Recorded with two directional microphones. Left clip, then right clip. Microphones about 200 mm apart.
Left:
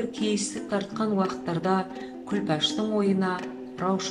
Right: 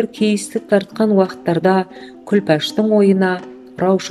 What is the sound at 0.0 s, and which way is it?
Speech, 50° right (ahead or behind).